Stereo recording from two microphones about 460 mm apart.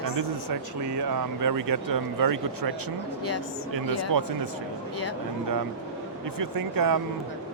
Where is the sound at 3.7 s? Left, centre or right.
Right.